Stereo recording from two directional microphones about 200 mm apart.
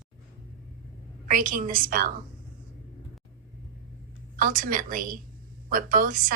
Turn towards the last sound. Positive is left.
turn(degrees=-45)  # may be behind; listen again after turning